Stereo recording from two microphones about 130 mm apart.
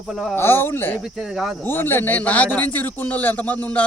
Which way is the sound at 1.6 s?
15° left (ahead or behind).